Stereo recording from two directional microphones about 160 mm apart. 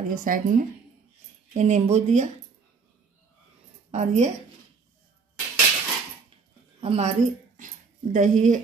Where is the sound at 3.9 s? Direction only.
45° right (ahead or behind).